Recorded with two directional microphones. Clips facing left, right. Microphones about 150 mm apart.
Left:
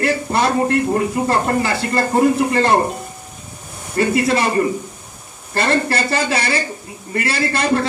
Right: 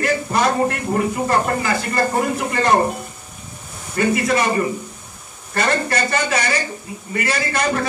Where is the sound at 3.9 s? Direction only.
30° left (ahead or behind).